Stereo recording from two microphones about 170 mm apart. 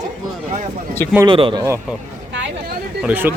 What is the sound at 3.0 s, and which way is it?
Speech, 10° right (ahead or behind).